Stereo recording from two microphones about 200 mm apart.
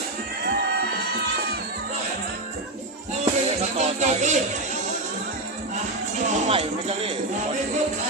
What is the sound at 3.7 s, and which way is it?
Music, 35° right (ahead or behind).